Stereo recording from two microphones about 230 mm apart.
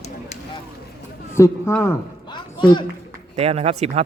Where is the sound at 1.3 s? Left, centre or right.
Centre.